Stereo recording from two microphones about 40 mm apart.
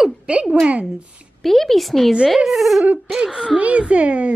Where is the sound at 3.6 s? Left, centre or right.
Right.